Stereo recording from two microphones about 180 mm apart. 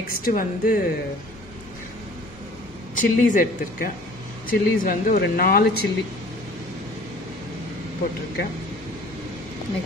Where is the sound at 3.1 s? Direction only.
45° left (ahead or behind).